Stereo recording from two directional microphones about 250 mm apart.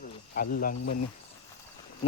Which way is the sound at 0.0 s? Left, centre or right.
Left.